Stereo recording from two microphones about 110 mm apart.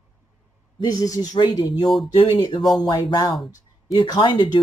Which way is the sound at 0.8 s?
35° left (ahead or behind).